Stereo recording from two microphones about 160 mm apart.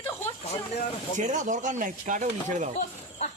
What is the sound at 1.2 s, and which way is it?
Speech, 50° right (ahead or behind).